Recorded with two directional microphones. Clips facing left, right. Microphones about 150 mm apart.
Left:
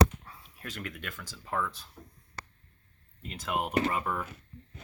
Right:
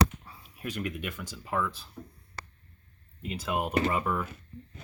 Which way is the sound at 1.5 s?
5° right (ahead or behind).